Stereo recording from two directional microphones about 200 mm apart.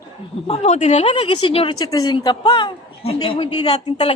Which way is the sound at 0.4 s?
30° left (ahead or behind).